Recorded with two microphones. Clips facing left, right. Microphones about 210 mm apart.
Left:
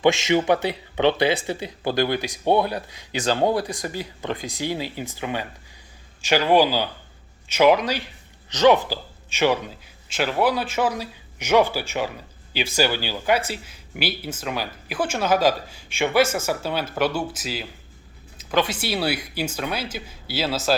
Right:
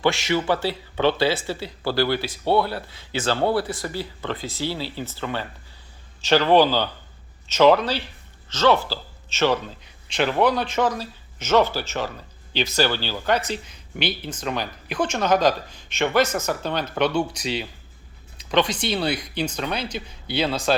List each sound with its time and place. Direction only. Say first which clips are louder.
0.0 s speech: left 3 dB; 20° left (ahead or behind)